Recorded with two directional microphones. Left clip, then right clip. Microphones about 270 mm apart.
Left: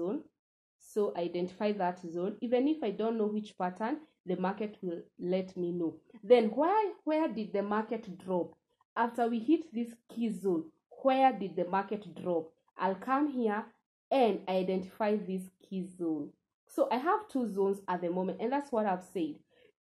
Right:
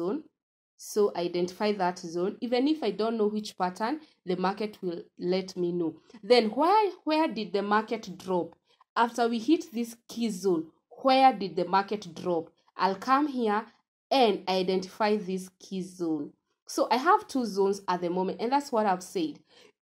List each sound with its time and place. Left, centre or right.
0.8 s speech: right